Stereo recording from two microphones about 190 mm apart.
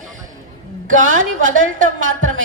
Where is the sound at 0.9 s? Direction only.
45° right (ahead or behind).